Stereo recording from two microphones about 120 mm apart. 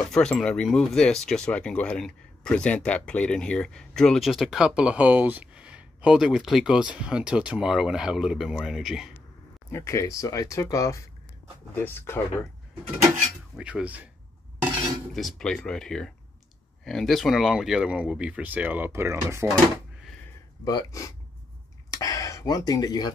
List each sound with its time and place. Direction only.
0.0 s speech: 5° left (ahead or behind)
9.7 s speech: 20° left (ahead or behind)
13.6 s speech: 10° right (ahead or behind)
15.1 s speech: 5° left (ahead or behind); by 19.4 s 20° right (ahead or behind)
20.6 s speech: 30° left (ahead or behind)